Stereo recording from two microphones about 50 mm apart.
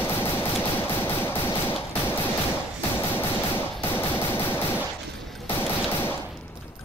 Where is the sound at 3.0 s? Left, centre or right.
Left.